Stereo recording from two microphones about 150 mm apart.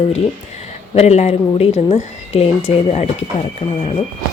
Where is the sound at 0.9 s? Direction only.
45° left (ahead or behind).